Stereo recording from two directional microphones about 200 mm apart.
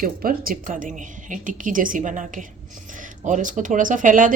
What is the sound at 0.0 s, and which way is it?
A woman's voice, 45° right (ahead or behind).